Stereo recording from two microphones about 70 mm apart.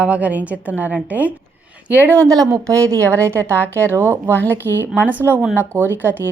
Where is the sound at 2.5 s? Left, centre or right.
Right.